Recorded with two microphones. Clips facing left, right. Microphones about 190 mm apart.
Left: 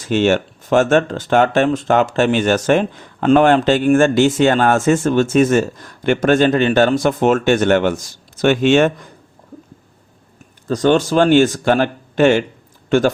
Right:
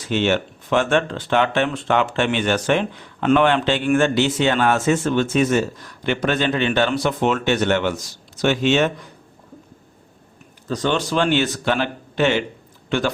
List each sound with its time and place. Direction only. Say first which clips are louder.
0.0 s speech: left 5 dB; 45° left (ahead or behind)
10.7 s speech: left 7 dB; 45° left (ahead or behind)